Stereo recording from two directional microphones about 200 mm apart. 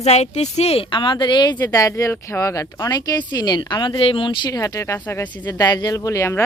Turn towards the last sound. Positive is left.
turn(degrees=15)  # may be behind; listen again after turning